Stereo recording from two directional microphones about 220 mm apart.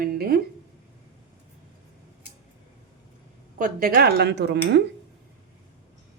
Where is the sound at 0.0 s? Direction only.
45° right (ahead or behind).